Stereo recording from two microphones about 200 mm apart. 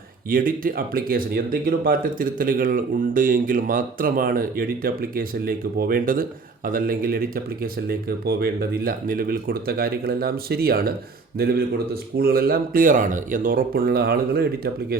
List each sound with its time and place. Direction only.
0.3 s speech: 45° right (ahead or behind)